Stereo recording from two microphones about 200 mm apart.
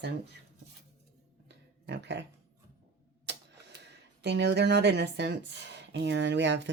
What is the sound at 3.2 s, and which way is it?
A woman's voice, 60° right (ahead or behind).